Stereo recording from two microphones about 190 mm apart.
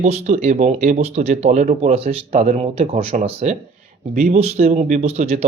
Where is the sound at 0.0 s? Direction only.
35° right (ahead or behind).